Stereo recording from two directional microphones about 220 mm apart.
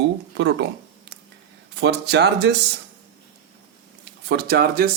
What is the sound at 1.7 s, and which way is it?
Speech, 50° right (ahead or behind).